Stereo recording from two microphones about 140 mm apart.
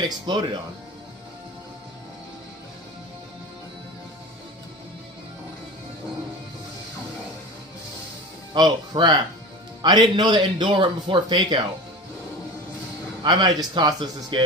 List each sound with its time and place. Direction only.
0.3 s speech: 30° right (ahead or behind)
8.5 s speech: 30° right (ahead or behind)
13.2 s speech: 30° right (ahead or behind)